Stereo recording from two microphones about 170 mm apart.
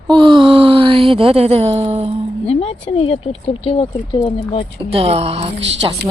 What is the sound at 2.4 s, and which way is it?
Speech, 35° left (ahead or behind).